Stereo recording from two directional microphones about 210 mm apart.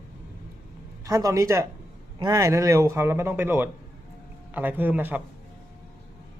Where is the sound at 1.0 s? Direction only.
15° right (ahead or behind).